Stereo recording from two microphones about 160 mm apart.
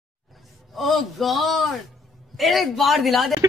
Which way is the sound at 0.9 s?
Centre (ahead or behind).